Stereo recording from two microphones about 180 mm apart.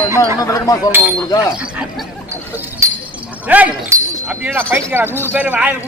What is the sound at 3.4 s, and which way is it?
Speech, 10° right (ahead or behind).